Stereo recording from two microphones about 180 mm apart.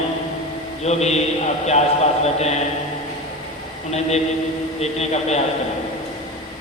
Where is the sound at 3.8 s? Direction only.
35° left (ahead or behind).